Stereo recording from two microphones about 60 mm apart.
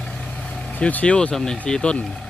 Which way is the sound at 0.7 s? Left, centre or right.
Left.